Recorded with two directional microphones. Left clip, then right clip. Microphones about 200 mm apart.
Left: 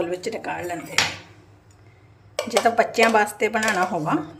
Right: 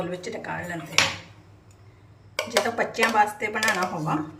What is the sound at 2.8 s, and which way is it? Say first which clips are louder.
Speech: left 2 dB; 40° left (ahead or behind).